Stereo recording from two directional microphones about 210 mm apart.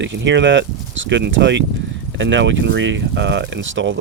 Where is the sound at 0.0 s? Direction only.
60° right (ahead or behind).